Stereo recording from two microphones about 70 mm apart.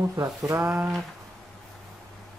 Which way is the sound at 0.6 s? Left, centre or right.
Centre.